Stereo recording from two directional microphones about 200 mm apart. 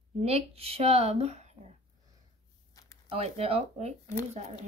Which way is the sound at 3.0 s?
30° right (ahead or behind).